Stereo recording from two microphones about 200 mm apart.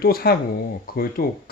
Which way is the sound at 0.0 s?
50° left (ahead or behind).